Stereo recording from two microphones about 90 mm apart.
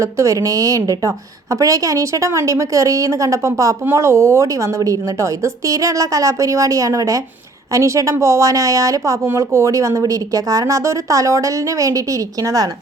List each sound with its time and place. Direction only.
0.0 s speech: 35° right (ahead or behind)